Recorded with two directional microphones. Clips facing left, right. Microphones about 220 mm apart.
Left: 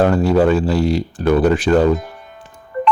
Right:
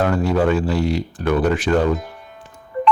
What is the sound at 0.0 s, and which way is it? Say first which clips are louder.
Speech: left 4 dB; 30° left (ahead or behind).